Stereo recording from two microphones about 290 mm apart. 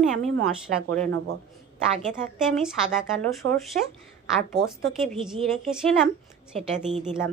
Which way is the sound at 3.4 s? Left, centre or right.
Right.